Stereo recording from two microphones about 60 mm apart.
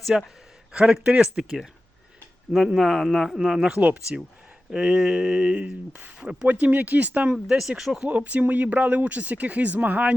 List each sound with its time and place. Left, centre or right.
0.0 s speech: centre
1.0 s speech: centre
2.7 s speech: centre
3.8 s speech: right
4.7 s speech: centre
6.5 s speech: right
7.3 s speech: centre
8.0 s speech: right